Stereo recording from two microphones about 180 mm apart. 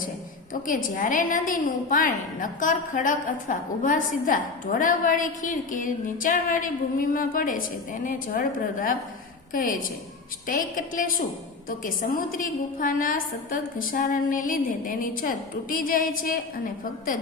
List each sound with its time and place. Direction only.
0.7 s a woman's voice: 50° left (ahead or behind)